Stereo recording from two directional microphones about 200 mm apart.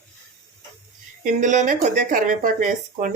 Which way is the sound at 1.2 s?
40° right (ahead or behind).